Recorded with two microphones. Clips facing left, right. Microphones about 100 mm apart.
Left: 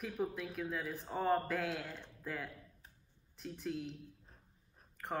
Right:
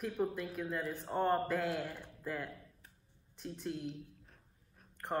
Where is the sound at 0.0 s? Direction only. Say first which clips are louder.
Right 3 dB; centre (ahead or behind).